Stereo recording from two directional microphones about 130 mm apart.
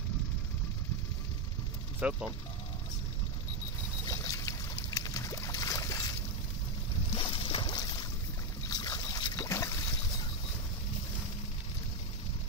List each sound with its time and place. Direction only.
2.0 s speech: 10° right (ahead or behind)
4.0 s boat: 30° left (ahead or behind)
7.1 s boat: 40° left (ahead or behind); by 9.8 s 25° left (ahead or behind)